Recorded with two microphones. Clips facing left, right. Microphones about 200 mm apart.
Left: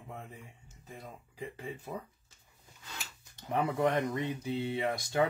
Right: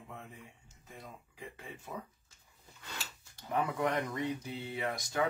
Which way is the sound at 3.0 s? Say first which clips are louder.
Right 1 dB; 25° left (ahead or behind).